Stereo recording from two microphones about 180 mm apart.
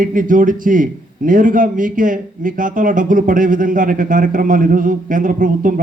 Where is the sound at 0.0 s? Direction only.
50° right (ahead or behind).